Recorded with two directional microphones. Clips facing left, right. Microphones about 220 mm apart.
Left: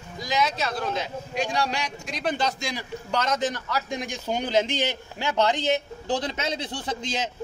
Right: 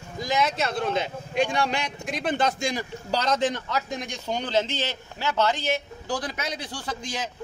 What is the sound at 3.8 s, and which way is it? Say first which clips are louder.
A man's voice: left 2 dB; centre (ahead or behind).